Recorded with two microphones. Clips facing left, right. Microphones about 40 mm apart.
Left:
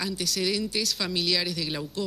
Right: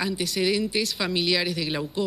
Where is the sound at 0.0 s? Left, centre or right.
Centre.